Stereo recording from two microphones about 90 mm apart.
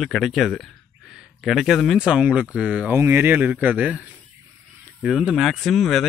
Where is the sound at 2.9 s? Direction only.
25° right (ahead or behind).